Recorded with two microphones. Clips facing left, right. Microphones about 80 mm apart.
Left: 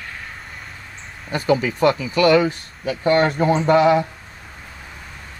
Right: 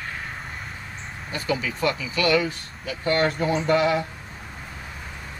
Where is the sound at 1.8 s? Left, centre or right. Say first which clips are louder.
Left 8 dB; left.